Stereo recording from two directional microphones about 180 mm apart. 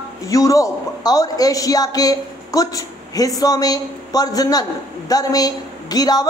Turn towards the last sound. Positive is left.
turn(degrees=20)  # may be behind; listen again after turning